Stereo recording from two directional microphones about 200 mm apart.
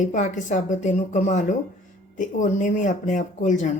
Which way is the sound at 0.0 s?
40° left (ahead or behind).